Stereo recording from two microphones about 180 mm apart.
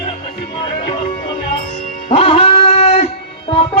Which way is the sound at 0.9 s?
25° left (ahead or behind).